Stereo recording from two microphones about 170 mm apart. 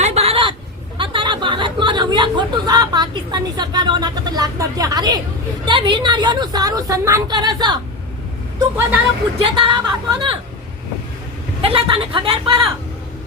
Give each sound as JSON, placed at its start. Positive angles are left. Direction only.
{"t": 0.0, "sound": "a sound", "side_deg": -35}
{"t": 0.9, "sound": "chatter", "side_deg": -30}
{"t": 5.6, "sound": "a woman's voice", "side_deg": -30}
{"t": 9.4, "sound": "a woman's voice", "side_deg": -30}
{"t": 11.6, "sound": "a woman's voice", "side_deg": -30}